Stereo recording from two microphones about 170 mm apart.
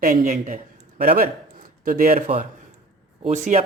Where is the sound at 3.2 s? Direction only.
40° right (ahead or behind).